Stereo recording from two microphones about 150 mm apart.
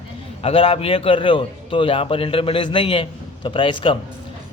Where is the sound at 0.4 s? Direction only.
40° left (ahead or behind).